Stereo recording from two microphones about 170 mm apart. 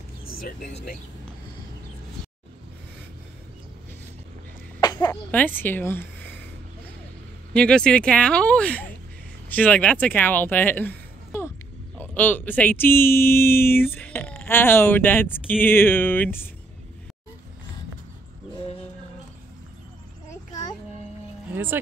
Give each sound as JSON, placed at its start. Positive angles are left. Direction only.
{"t": 0.4, "sound": "speech", "side_deg": 60}
{"t": 4.7, "sound": "a sound", "side_deg": 25}
{"t": 5.3, "sound": "speech", "side_deg": 10}
{"t": 7.5, "sound": "speech", "side_deg": 5}